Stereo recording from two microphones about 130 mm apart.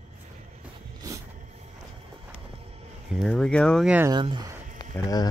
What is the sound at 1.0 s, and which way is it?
Vehicle, 25° right (ahead or behind).